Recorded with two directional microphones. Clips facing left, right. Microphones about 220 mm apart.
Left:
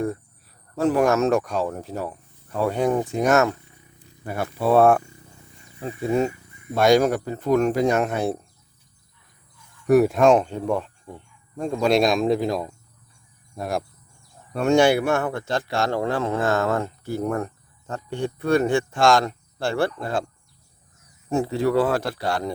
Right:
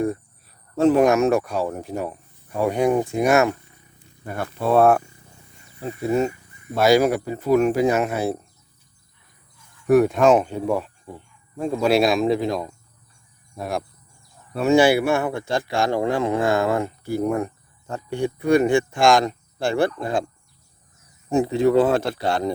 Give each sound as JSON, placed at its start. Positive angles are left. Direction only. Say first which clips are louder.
{"t": 0.8, "sound": "speech", "louder": "right 3 dB", "side_deg": -25}
{"t": 4.7, "sound": "speech", "louder": "even", "side_deg": 0}
{"t": 6.1, "sound": "speech", "louder": "right 1 dB", "side_deg": 0}
{"t": 9.9, "sound": "speech", "louder": "even", "side_deg": 0}
{"t": 21.2, "sound": "speech", "louder": "right 4 dB", "side_deg": -15}